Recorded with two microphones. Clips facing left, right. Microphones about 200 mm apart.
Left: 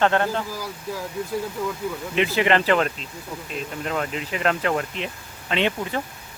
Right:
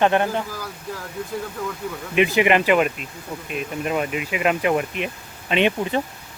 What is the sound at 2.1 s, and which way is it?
Speech, 15° right (ahead or behind).